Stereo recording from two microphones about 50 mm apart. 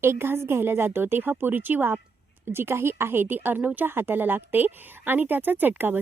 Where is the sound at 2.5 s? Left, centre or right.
Right.